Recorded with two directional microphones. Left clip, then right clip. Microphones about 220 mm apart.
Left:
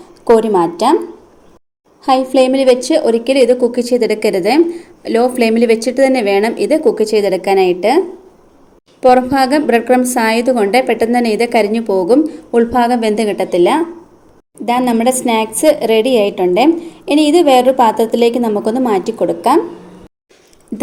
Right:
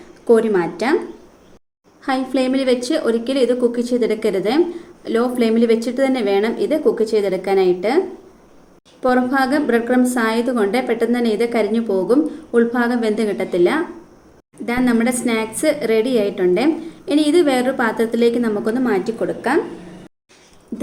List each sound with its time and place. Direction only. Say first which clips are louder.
0.5 s a woman's voice: left 7 dB; 25° left (ahead or behind)
2.0 s a woman's voice: left 9 dB; 25° left (ahead or behind)
9.0 s a woman's voice: left 7 dB; 35° left (ahead or behind)